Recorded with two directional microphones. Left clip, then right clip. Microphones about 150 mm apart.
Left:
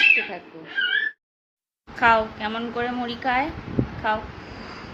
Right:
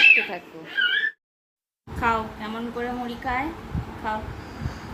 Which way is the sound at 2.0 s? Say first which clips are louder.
Left 6 dB; 80° left.